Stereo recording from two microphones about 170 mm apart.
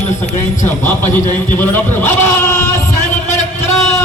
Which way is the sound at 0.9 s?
10° left (ahead or behind).